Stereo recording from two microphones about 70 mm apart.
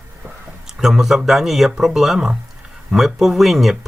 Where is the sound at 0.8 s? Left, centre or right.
Centre.